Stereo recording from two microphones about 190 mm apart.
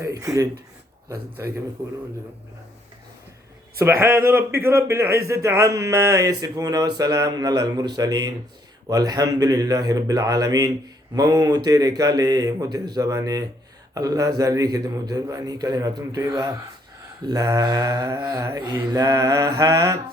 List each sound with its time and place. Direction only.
0.0 s speech: 20° right (ahead or behind)
3.8 s speech: 10° right (ahead or behind)
6.9 s mantra: 20° right (ahead or behind)